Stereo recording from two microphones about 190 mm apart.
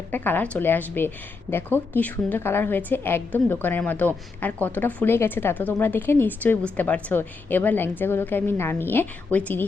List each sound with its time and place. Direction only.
0.1 s speech: 10° left (ahead or behind)